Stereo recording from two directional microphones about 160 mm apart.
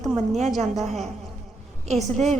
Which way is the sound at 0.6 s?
45° right (ahead or behind).